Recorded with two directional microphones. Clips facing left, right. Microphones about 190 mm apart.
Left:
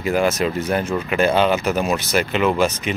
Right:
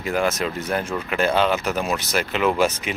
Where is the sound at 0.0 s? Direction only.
5° left (ahead or behind).